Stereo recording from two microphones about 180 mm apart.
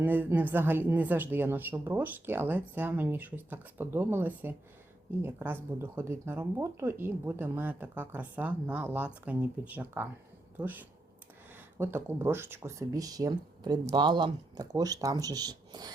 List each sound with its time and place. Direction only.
0.0 s speech: 10° right (ahead or behind)